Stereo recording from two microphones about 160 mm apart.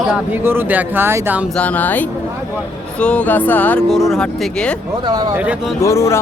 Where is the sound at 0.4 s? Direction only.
10° right (ahead or behind).